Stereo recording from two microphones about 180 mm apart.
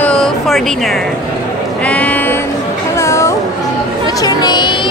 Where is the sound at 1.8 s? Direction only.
5° left (ahead or behind).